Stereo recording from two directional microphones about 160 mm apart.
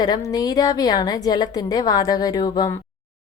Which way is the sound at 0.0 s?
25° left (ahead or behind).